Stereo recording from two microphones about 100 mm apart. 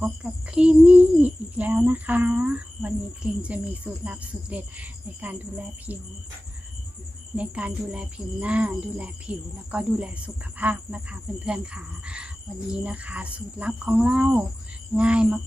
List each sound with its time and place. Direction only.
0.0 s speech: 10° right (ahead or behind)
7.3 s speech: 10° right (ahead or behind)